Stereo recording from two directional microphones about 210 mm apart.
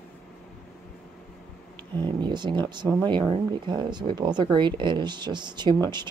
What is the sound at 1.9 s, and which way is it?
Speech, 20° right (ahead or behind).